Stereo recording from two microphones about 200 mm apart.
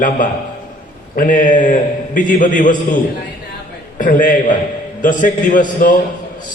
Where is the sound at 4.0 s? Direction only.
40° left (ahead or behind).